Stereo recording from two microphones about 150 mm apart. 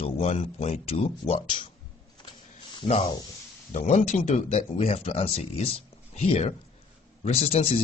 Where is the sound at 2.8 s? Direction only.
55° left (ahead or behind).